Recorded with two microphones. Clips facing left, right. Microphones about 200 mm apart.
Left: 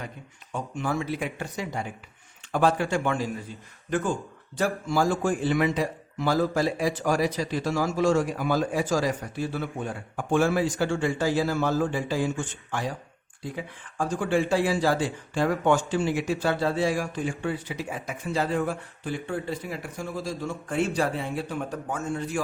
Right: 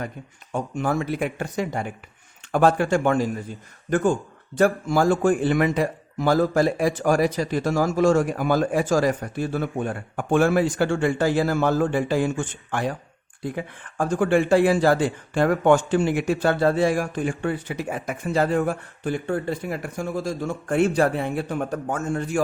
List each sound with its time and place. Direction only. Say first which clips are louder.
0.5 s a man's voice: right 5 dB; 50° right (ahead or behind)